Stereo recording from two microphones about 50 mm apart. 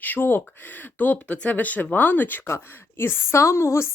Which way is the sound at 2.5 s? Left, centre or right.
Left.